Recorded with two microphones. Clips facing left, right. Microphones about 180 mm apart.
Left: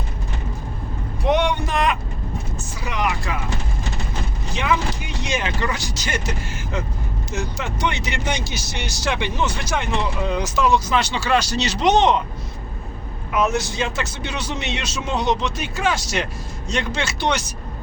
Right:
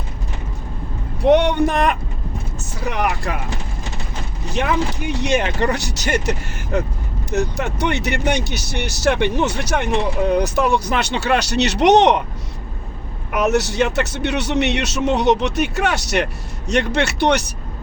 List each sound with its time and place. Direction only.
1.2 s a sound: 60° right (ahead or behind)
2.8 s music: 60° right (ahead or behind)
4.5 s speech: 60° right (ahead or behind)
13.3 s speech: 70° right (ahead or behind)